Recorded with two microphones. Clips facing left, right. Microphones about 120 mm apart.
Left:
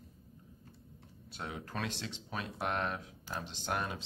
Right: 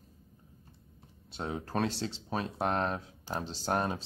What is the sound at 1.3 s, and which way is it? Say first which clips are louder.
Speech: right 7 dB; 30° right (ahead or behind).